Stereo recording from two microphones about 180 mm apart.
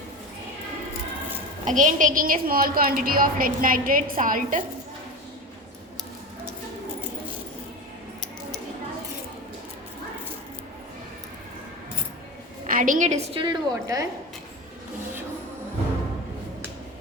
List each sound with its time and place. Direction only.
1.6 s a woman's voice: 45° right (ahead or behind)
12.6 s a woman's voice: 50° right (ahead or behind); by 14.1 s 20° right (ahead or behind)